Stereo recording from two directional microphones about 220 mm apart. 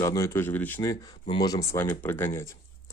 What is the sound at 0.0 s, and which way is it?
Speech, 15° left (ahead or behind).